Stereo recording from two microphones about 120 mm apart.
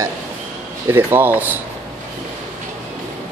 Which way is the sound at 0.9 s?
15° right (ahead or behind).